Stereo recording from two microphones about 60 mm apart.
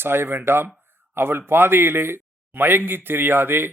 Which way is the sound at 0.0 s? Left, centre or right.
Right.